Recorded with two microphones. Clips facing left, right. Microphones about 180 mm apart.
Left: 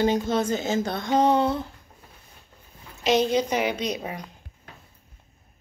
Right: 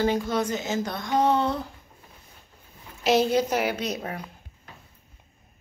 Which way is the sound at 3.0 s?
5° right (ahead or behind).